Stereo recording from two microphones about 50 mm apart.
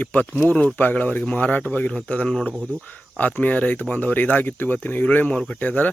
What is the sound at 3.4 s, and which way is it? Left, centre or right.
Speech, left.